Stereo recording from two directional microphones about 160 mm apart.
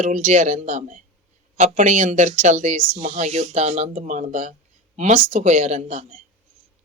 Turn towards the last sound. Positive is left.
turn(degrees=-45)  # may be behind; listen again after turning